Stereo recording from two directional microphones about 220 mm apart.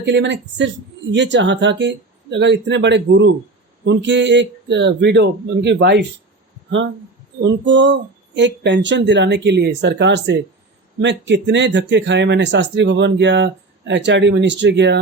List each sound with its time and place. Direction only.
0.0 s speech: 55° right (ahead or behind)
7.4 s speech: 55° right (ahead or behind)